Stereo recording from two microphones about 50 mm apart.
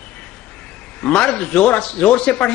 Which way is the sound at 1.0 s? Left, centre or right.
Centre.